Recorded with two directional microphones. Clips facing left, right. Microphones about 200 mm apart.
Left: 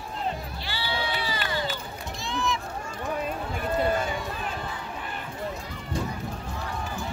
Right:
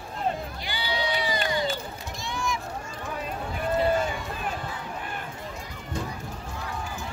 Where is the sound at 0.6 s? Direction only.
15° right (ahead or behind).